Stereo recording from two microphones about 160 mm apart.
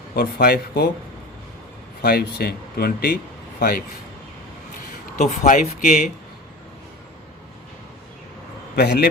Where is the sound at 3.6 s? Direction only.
65° left (ahead or behind).